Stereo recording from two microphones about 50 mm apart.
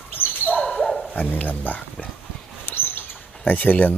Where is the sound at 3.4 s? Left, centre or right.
Left.